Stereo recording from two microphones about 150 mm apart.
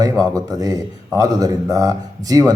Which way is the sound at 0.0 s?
25° right (ahead or behind).